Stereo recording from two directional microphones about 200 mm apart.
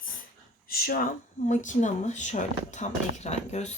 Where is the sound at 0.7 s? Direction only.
45° left (ahead or behind).